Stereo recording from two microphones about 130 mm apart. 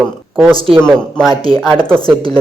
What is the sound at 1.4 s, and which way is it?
Speech, 45° right (ahead or behind).